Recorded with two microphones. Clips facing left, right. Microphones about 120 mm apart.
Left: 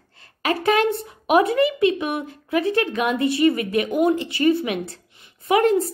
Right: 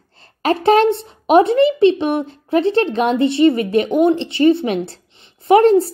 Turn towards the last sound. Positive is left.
turn(degrees=-30)  # may be behind; listen again after turning